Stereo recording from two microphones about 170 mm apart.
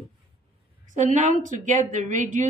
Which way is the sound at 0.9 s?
45° right (ahead or behind).